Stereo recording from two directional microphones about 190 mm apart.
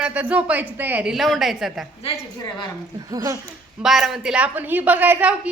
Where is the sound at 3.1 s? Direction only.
20° right (ahead or behind).